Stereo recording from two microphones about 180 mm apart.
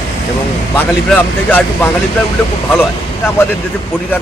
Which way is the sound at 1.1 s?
10° left (ahead or behind).